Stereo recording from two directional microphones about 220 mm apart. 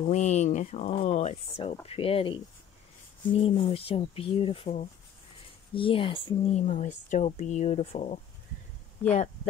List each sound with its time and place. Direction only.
0.1 s speech: 30° left (ahead or behind)